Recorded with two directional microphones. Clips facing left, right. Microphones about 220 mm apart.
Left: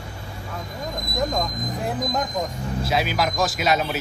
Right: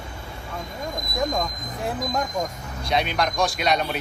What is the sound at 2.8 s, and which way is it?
Speech, 5° left (ahead or behind).